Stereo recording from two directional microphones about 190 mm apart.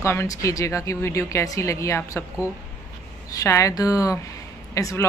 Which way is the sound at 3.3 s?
15° left (ahead or behind).